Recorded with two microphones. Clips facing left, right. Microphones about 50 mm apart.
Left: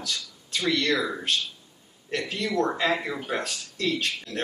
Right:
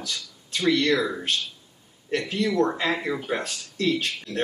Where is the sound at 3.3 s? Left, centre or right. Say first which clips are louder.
Right 1 dB; centre.